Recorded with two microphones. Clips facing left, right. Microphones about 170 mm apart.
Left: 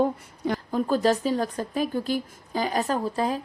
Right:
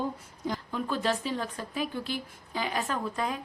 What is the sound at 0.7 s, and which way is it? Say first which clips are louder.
Speech: left 8 dB; 40° left (ahead or behind).